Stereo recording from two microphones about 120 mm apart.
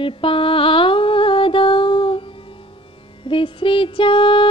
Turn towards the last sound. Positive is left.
turn(degrees=45)  # may be behind; listen again after turning